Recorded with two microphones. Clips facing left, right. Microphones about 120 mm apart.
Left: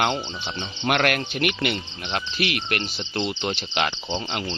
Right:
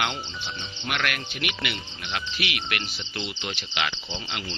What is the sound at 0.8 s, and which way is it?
Speech, 50° left (ahead or behind).